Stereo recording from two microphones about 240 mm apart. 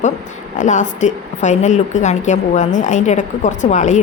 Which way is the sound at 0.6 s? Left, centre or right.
Left.